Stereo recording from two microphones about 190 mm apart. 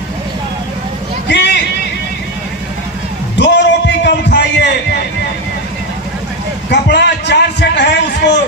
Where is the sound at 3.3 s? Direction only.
65° left (ahead or behind).